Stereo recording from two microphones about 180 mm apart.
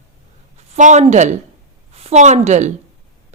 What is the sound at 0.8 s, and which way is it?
A woman's voice, 40° right (ahead or behind).